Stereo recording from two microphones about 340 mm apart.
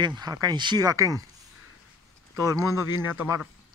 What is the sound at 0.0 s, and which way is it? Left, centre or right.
Speech, centre.